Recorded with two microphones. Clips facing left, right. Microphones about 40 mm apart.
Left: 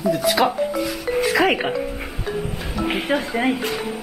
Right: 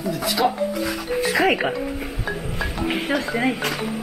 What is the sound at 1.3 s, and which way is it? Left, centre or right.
Speech, centre.